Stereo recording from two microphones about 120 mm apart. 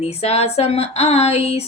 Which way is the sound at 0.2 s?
60° left (ahead or behind).